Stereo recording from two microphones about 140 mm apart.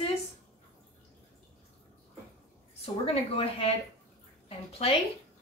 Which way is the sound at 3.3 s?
45° left (ahead or behind).